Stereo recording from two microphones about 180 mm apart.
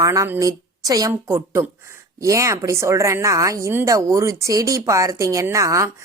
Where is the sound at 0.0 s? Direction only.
15° right (ahead or behind).